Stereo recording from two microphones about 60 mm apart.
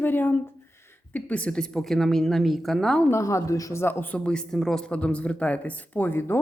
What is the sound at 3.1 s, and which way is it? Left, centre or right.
Speech, left.